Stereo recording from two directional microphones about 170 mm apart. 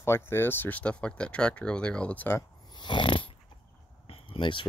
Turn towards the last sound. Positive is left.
turn(degrees=30)  # may be behind; listen again after turning